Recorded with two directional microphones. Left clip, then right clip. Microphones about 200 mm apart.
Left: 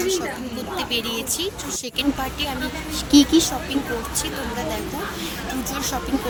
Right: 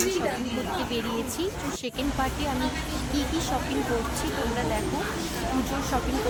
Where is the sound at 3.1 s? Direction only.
55° left (ahead or behind).